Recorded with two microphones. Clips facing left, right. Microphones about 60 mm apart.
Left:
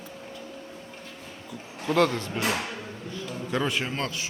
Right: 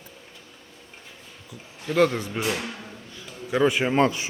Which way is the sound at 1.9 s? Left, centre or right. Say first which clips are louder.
Right 2 dB; centre.